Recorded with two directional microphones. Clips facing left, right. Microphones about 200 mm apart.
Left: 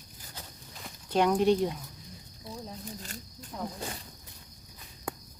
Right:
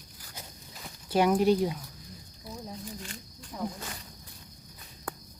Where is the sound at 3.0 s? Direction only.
40° left (ahead or behind).